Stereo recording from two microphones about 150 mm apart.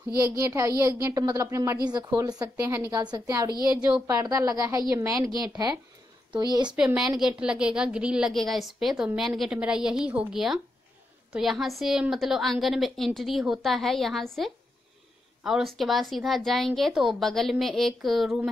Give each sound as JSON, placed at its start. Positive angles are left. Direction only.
{"t": 0.1, "sound": "a woman's voice", "side_deg": -20}
{"t": 2.5, "sound": "a woman's voice", "side_deg": -15}
{"t": 6.7, "sound": "a woman's voice", "side_deg": -5}